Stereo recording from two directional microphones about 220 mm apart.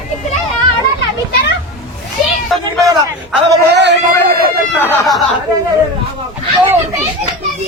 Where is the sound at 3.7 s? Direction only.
50° right (ahead or behind).